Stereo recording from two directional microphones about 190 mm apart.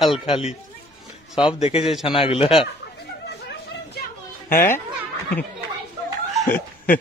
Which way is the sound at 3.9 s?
50° left (ahead or behind).